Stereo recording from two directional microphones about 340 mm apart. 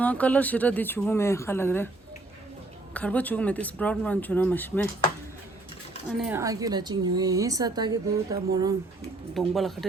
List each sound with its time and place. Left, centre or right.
0.0 s speech: centre
2.9 s speech: centre
6.1 s speech: centre
9.3 s speech: centre